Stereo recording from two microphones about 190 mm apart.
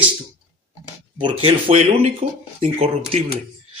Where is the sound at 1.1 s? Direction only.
30° right (ahead or behind).